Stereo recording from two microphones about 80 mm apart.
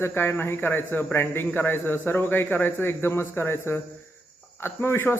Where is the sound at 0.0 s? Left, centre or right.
Left.